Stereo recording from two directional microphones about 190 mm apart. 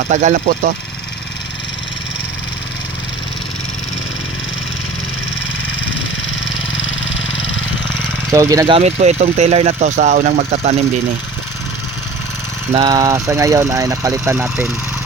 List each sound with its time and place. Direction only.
0.1 s speech: 40° right (ahead or behind)
6.7 s vehicle: 90° left
8.3 s speech: 15° right (ahead or behind)
8.7 s speech: 35° right (ahead or behind)
10.3 s speech: 30° right (ahead or behind)
12.8 s speech: 15° right (ahead or behind)